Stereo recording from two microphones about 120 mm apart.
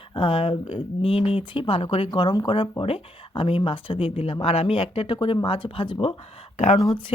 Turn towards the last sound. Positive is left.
turn(degrees=35)  # may be behind; listen again after turning